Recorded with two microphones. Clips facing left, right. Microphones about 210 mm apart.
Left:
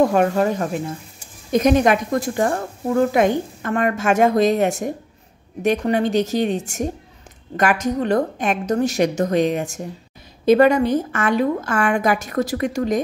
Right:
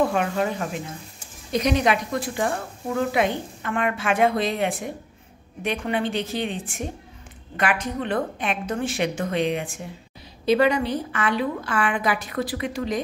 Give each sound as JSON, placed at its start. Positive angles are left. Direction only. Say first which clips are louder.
{"t": 0.0, "sound": "a woman's voice", "louder": "left 6 dB", "side_deg": 45}